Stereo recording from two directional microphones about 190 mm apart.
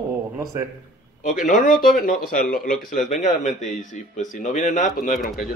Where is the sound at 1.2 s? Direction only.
45° left (ahead or behind).